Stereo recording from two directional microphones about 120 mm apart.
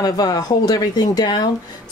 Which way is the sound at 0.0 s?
30° left (ahead or behind).